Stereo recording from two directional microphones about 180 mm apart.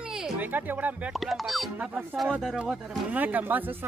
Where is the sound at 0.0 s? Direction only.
5° right (ahead or behind).